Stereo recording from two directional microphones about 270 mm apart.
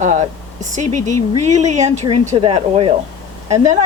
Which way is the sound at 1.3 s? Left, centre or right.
Right.